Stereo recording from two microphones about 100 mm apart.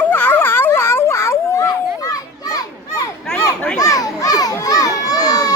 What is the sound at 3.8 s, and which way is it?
Children playing, 35° left (ahead or behind).